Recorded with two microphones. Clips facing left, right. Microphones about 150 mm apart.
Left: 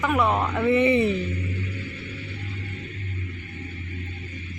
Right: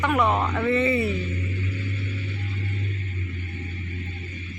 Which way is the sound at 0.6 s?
15° left (ahead or behind).